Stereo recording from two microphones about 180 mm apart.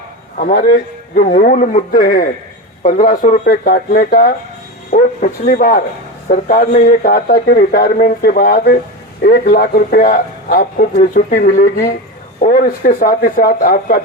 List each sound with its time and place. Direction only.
0.3 s a man's voice: 50° left (ahead or behind)